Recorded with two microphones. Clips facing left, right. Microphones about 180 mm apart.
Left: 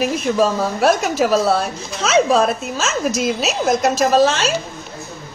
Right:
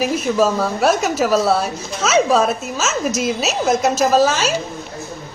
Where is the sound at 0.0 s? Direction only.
Centre (ahead or behind).